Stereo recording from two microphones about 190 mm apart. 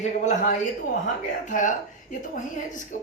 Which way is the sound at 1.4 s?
40° left (ahead or behind).